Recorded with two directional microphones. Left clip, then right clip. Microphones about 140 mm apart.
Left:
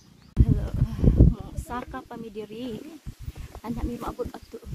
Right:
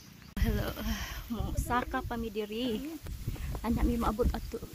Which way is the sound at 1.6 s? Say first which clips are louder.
Right 3 dB; centre (ahead or behind).